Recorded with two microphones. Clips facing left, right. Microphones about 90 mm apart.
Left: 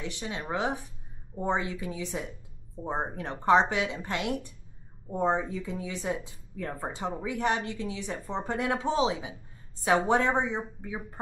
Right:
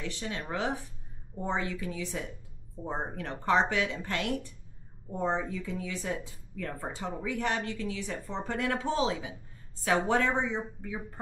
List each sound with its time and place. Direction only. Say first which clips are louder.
0.0 s speech: left 1 dB; 15° left (ahead or behind)